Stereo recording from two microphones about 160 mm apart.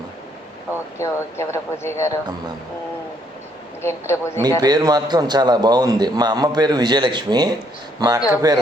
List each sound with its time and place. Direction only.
0.9 s speech: 15° left (ahead or behind)
3.8 s speech: 15° left (ahead or behind)
4.6 s a man's voice: 25° right (ahead or behind)